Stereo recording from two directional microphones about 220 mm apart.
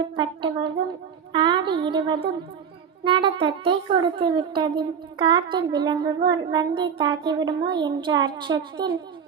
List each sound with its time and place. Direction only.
0.2 s a child's voice: 20° right (ahead or behind)